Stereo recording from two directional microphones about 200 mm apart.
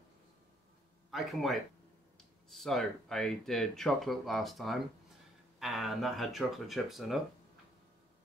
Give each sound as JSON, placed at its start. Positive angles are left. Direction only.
{"t": 1.1, "sound": "speech", "side_deg": 0}